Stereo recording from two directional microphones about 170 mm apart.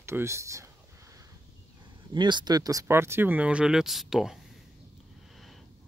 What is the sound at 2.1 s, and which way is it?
Speech, 25° right (ahead or behind).